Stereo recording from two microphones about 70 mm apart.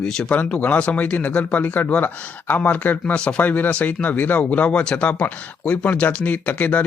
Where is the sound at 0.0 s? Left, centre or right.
Centre.